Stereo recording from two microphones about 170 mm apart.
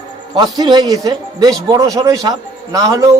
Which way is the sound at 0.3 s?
25° right (ahead or behind).